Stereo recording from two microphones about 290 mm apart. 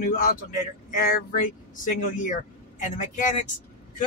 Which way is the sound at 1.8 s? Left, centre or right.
Left.